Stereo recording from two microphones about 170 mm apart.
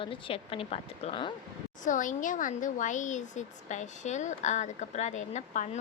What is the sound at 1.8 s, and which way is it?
Speech, 50° left (ahead or behind).